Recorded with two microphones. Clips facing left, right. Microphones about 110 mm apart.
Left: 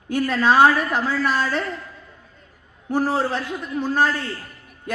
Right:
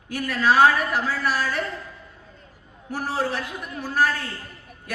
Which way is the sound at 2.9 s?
25° left (ahead or behind).